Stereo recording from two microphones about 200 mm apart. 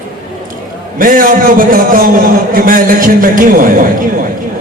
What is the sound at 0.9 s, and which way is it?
A man's voice, 45° right (ahead or behind).